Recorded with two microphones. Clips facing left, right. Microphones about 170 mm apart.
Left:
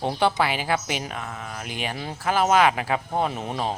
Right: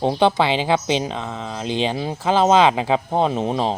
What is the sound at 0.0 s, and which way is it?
Speech, 20° right (ahead or behind).